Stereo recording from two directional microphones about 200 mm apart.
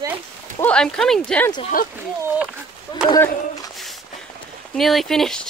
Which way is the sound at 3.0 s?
20° left (ahead or behind).